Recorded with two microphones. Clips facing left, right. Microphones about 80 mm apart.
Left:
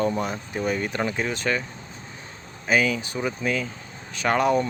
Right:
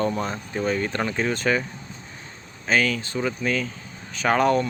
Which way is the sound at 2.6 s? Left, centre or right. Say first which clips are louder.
Even; centre.